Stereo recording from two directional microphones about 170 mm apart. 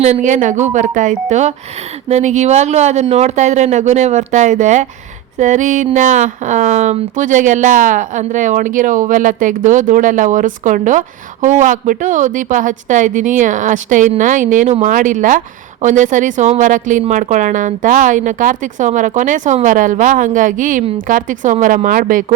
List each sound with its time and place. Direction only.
0.0 s speech: 45° right (ahead or behind)